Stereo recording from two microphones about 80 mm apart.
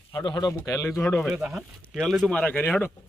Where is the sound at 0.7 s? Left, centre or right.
Left.